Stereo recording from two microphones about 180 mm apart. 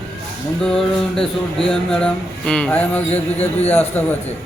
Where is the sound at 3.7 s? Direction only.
10° left (ahead or behind).